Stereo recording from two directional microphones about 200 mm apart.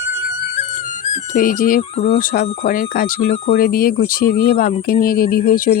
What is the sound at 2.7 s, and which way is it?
Speech, 45° left (ahead or behind).